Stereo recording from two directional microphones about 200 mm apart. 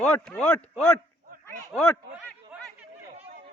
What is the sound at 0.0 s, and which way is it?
Speech, 5° left (ahead or behind).